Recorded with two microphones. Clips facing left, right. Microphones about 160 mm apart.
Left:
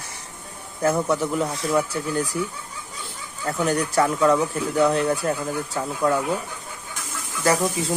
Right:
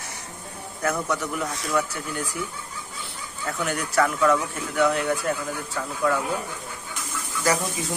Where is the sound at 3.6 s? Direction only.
35° left (ahead or behind).